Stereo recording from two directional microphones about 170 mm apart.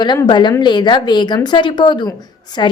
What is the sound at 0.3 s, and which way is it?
Speech, 25° left (ahead or behind).